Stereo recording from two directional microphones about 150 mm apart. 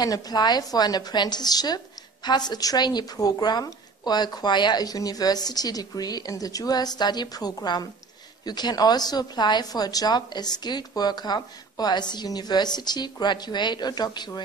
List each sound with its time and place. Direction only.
0.0 s a woman's voice: 25° left (ahead or behind)